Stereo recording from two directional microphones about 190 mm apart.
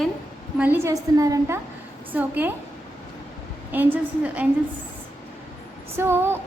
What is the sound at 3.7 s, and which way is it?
Speech, 10° right (ahead or behind).